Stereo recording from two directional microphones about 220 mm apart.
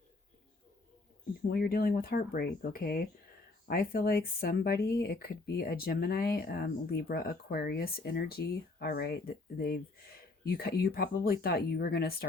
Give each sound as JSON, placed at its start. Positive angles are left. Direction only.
{"t": 1.5, "sound": "speech", "side_deg": 45}